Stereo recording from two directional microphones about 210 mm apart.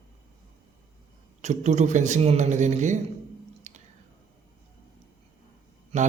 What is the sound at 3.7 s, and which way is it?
Squish, 35° right (ahead or behind).